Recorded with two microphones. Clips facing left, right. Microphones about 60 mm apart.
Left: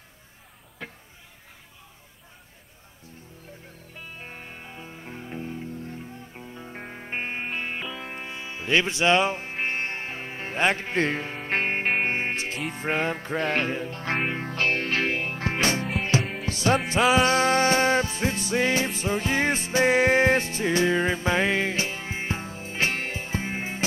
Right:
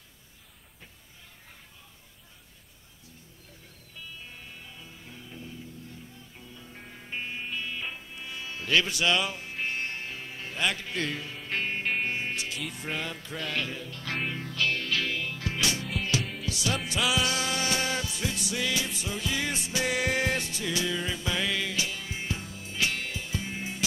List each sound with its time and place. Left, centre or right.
0.8 s a sound: left
3.9 s music: left
8.3 s music: left